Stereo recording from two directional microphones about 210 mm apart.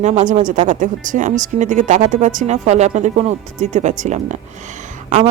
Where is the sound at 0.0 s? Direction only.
35° right (ahead or behind).